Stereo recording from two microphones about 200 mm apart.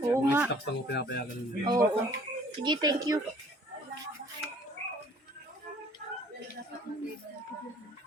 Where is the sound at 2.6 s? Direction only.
20° right (ahead or behind).